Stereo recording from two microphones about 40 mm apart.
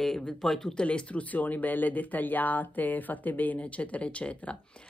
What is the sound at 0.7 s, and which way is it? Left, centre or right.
Speech, left.